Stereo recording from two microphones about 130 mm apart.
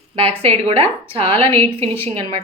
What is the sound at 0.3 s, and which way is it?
A woman's voice, 50° right (ahead or behind).